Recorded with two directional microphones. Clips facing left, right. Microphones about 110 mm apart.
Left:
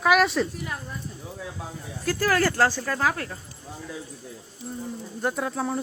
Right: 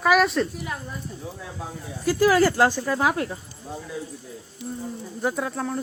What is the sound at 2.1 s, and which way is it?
Speech, 10° right (ahead or behind).